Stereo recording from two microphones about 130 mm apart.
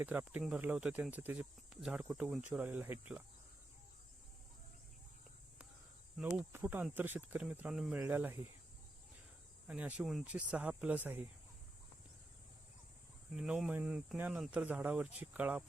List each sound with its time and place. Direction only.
0.0 s speech: 15° right (ahead or behind)
1.7 s cricket: 5° right (ahead or behind)
2.0 s speech: 5° right (ahead or behind)
6.1 s speech: 5° right (ahead or behind)
7.9 s speech: 15° right (ahead or behind)
9.6 s speech: 10° right (ahead or behind)
13.3 s speech: 5° right (ahead or behind)